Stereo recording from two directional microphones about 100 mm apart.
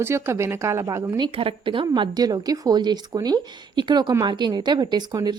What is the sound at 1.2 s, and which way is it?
A woman's voice, 60° right (ahead or behind).